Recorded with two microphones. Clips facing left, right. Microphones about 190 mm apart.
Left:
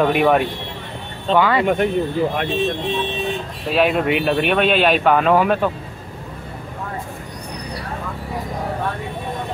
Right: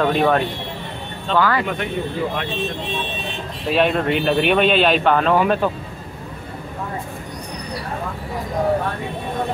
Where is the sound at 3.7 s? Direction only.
5° left (ahead or behind).